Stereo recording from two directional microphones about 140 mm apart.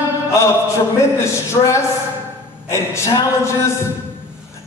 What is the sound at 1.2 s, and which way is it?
A man's voice, 20° left (ahead or behind).